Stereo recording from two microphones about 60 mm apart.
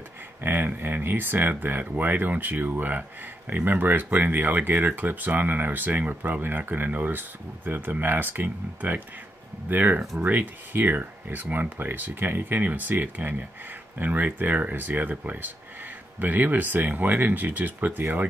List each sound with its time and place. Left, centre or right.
0.4 s speech: right